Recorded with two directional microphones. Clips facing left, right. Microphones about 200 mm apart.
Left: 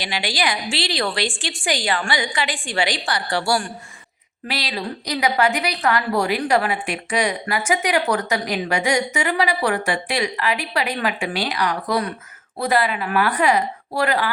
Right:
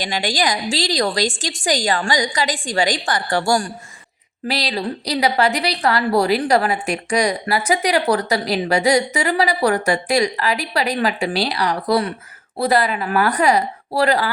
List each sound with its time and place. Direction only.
0.0 s a woman's voice: 45° right (ahead or behind)